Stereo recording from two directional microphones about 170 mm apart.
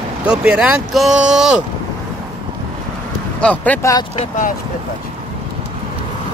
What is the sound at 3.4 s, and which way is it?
Speech, 10° left (ahead or behind).